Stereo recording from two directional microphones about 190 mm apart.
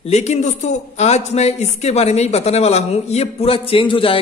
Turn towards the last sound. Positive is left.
turn(degrees=30)  # may be behind; listen again after turning